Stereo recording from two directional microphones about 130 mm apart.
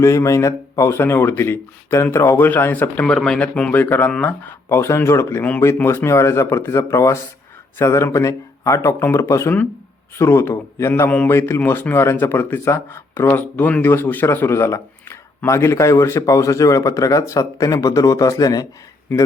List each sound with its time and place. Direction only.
0.0 s speech: 25° left (ahead or behind)